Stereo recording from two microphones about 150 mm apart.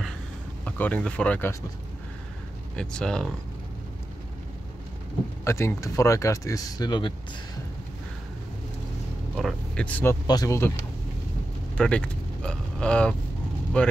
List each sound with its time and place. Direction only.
0.7 s speech: 10° left (ahead or behind)
2.7 s speech: 5° left (ahead or behind)
5.4 s speech: 20° left (ahead or behind)
9.4 s speech: 5° left (ahead or behind)
10.2 s speech: 25° left (ahead or behind)
11.7 s speech: 5° left (ahead or behind)